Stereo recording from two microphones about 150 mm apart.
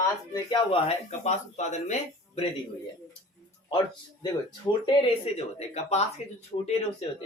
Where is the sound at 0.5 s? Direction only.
35° left (ahead or behind).